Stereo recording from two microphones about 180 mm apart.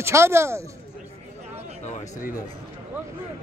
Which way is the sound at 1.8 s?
40° left (ahead or behind).